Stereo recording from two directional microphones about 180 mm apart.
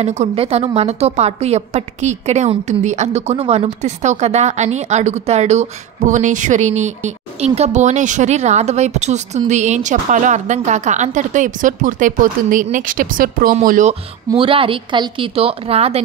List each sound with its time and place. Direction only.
0.0 s a woman's voice: 35° right (ahead or behind)